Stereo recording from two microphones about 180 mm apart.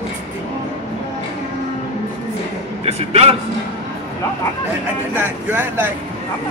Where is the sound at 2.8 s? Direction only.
35° right (ahead or behind).